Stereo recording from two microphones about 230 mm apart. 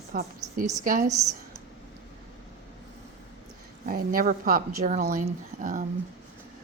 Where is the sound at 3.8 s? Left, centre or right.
Right.